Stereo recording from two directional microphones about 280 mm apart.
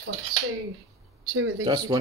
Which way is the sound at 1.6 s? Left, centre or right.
Centre.